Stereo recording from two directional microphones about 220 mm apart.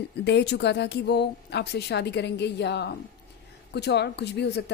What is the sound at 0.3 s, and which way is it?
A woman's voice, 50° left (ahead or behind).